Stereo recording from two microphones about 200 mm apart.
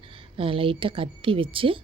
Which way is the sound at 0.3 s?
25° right (ahead or behind).